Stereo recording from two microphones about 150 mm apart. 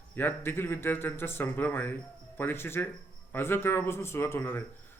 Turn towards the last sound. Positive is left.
turn(degrees=15)  # may be behind; listen again after turning